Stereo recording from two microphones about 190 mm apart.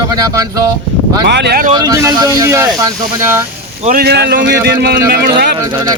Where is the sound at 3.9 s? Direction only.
55° right (ahead or behind).